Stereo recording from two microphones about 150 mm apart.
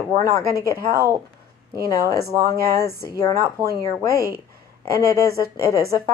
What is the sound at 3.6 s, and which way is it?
Speech, 25° right (ahead or behind).